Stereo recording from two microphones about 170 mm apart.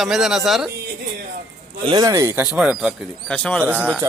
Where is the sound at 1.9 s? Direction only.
20° right (ahead or behind); by 2.9 s 5° right (ahead or behind).